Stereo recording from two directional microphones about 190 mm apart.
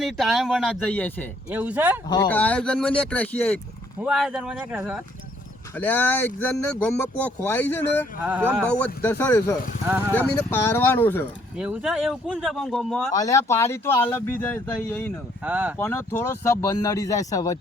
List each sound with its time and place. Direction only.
0.0 s speech: centre (ahead or behind)
1.5 s speech: 10° right (ahead or behind)
2.0 s speech: 20° left (ahead or behind)
2.3 s speech: 5° left (ahead or behind)
4.0 s speech: 5° right (ahead or behind)
5.7 s speech: 10° left (ahead or behind)
11.5 s speech: 5° right (ahead or behind)
13.1 s speech: 15° left (ahead or behind)
15.4 s speech: 10° right (ahead or behind)
15.8 s speech: 10° left (ahead or behind)